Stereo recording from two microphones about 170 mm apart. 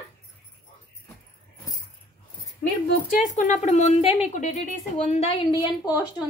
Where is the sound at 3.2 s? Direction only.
45° left (ahead or behind).